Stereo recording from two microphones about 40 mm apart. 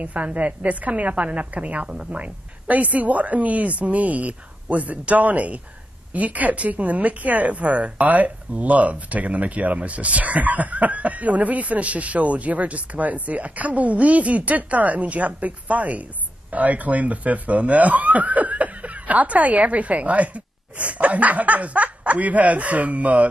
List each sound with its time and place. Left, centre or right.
0.0 s speech: right